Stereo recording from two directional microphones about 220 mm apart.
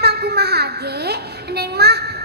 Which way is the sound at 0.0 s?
45° right (ahead or behind).